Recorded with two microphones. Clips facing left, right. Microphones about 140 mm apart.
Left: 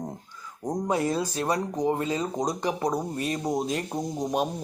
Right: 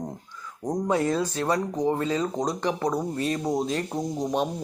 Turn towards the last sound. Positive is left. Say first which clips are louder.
# right 1 dB
turn(degrees=15)  # may be behind; listen again after turning